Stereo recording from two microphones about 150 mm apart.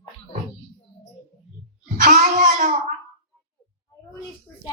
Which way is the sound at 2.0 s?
60° right (ahead or behind).